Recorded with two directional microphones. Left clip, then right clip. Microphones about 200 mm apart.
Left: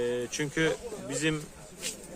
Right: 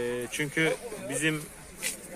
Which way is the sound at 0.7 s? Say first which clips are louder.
Right 1 dB; 50° left (ahead or behind).